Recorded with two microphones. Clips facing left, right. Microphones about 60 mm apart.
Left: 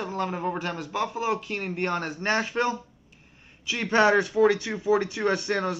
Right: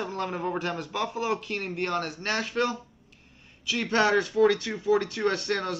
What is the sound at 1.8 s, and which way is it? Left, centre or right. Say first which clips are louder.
Speech: left 2 dB; left.